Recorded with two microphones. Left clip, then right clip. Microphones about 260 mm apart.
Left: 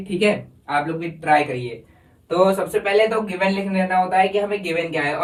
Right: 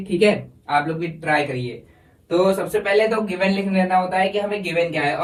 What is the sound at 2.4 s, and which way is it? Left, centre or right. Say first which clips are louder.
Speech: even; centre.